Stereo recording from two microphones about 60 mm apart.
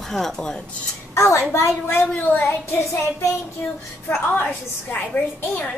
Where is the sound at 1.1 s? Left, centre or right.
Left.